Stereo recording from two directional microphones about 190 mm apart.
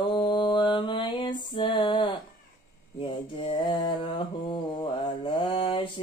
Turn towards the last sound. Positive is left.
turn(degrees=25)  # may be behind; listen again after turning